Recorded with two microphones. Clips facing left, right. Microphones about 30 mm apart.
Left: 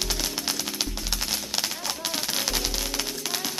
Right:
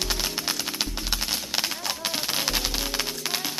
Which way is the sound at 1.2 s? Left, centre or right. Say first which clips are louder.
Even; centre.